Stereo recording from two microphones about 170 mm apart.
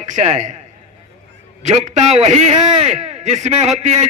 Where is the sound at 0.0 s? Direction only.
45° right (ahead or behind).